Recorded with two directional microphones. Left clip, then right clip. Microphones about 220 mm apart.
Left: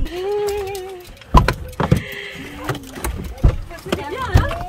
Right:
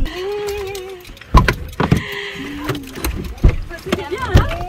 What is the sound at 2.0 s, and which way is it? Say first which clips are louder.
Sheep: right 4 dB; 10° left (ahead or behind).